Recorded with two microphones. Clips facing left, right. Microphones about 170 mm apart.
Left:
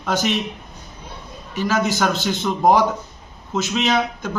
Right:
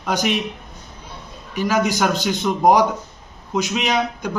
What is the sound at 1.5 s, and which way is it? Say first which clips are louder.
A man's voice: right 1 dB; 15° right (ahead or behind).